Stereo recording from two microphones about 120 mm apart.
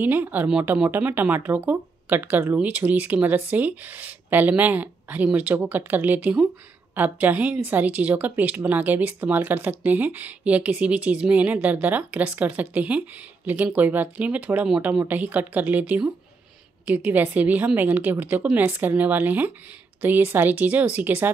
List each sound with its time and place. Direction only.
0.0 s a woman's voice: 15° right (ahead or behind)